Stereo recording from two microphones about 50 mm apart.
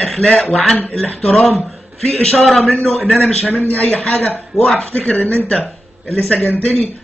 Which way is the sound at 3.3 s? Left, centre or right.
Left.